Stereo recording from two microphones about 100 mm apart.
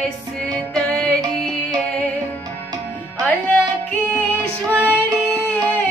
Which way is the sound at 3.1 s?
15° left (ahead or behind).